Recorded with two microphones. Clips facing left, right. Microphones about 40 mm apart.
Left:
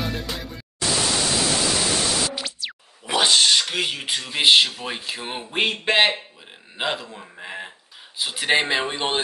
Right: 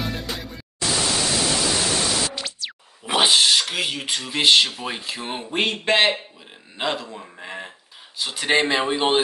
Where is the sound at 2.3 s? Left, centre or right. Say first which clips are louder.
Left 1 dB; centre.